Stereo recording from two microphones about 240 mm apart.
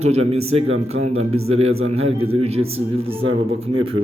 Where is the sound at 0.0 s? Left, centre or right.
Right.